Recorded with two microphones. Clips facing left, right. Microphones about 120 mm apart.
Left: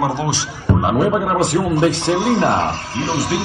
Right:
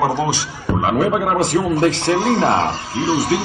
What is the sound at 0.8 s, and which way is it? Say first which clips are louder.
Speech: even; 5° left (ahead or behind).